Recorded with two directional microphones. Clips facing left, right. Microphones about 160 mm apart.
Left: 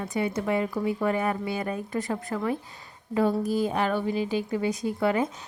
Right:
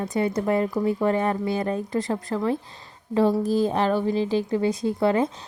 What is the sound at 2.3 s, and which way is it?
Speech, 15° right (ahead or behind).